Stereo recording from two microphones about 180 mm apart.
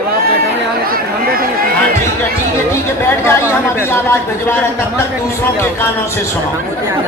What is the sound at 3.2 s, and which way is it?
A man's voice, 15° left (ahead or behind).